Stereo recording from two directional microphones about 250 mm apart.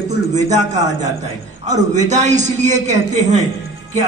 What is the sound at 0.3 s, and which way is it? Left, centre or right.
A man's voice, right.